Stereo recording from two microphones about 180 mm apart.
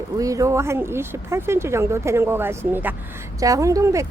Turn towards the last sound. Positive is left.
turn(degrees=-15)  # may be behind; listen again after turning